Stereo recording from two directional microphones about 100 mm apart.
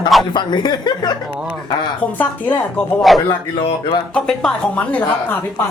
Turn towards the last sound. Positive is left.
turn(degrees=5)  # may be behind; listen again after turning